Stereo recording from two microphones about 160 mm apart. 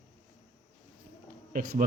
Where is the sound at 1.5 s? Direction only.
60° right (ahead or behind).